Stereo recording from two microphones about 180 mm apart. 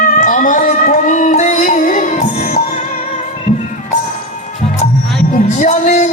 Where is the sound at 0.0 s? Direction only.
45° left (ahead or behind).